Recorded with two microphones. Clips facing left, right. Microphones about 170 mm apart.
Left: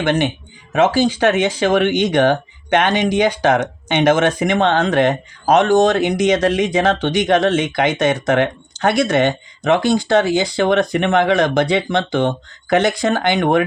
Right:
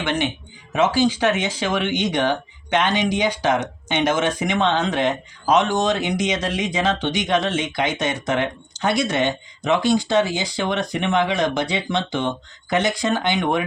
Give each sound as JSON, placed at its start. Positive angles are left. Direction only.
{"t": 0.0, "sound": "speech", "side_deg": 50}